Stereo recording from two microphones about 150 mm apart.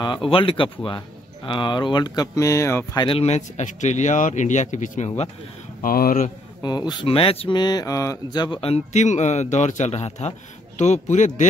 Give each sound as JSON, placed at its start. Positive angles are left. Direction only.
{"t": 0.0, "sound": "speech", "side_deg": 35}
{"t": 3.1, "sound": "speech", "side_deg": 45}
{"t": 5.8, "sound": "speech", "side_deg": 70}
{"t": 6.6, "sound": "speech", "side_deg": 30}